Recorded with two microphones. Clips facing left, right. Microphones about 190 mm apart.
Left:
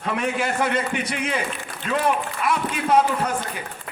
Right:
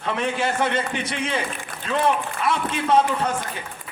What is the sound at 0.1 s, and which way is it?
A man's voice, 30° right (ahead or behind).